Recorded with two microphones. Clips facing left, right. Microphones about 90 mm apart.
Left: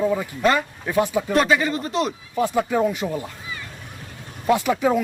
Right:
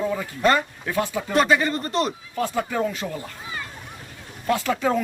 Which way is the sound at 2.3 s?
15° left (ahead or behind).